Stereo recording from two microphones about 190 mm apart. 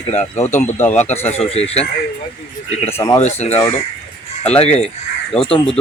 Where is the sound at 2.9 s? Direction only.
20° left (ahead or behind).